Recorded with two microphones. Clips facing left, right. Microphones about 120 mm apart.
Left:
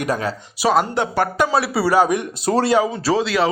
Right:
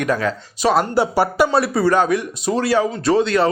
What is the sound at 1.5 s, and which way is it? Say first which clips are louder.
Speech: right 2 dB; centre (ahead or behind).